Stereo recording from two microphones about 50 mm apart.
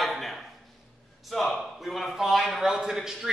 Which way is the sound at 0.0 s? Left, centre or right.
Centre.